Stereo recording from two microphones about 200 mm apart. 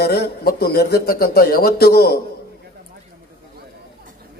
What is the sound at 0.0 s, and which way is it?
A man's voice, 50° left (ahead or behind).